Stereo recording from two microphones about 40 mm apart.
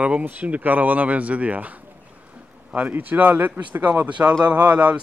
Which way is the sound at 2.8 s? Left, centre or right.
Right.